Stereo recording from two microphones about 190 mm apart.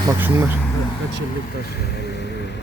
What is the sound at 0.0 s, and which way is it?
Speech, 15° right (ahead or behind).